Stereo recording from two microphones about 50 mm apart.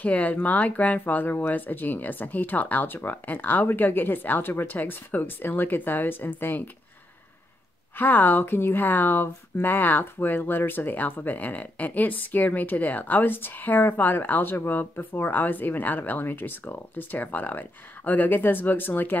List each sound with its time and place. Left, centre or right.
0.0 s speech: left
8.0 s speech: left